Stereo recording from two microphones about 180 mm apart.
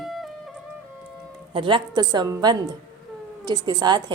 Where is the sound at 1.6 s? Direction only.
25° right (ahead or behind).